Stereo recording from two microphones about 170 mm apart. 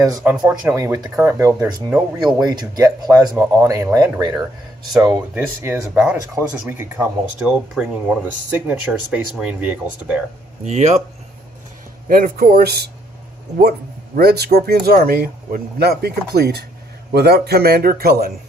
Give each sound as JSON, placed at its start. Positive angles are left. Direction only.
{"t": 0.0, "sound": "speech", "side_deg": -20}
{"t": 0.3, "sound": "speech", "side_deg": -10}
{"t": 5.3, "sound": "speech", "side_deg": -10}
{"t": 10.7, "sound": "speech", "side_deg": -40}
{"t": 12.0, "sound": "a man's voice", "side_deg": -60}
{"t": 14.2, "sound": "a man's voice", "side_deg": -70}